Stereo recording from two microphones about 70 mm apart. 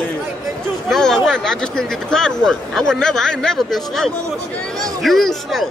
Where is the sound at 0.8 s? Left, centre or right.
Centre.